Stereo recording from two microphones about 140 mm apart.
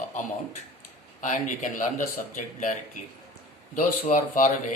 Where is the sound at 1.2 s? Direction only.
65° left (ahead or behind).